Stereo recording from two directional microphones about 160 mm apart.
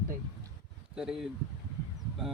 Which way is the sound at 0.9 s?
5° right (ahead or behind).